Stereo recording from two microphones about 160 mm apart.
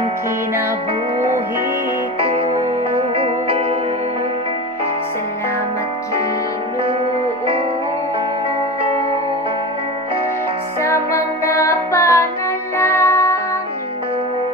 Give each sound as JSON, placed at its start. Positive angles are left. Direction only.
{"t": 2.1, "sound": "music", "side_deg": -35}
{"t": 10.8, "sound": "music", "side_deg": 20}